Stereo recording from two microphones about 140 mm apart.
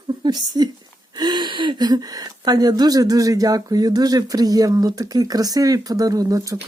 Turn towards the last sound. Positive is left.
turn(degrees=-25)  # may be behind; listen again after turning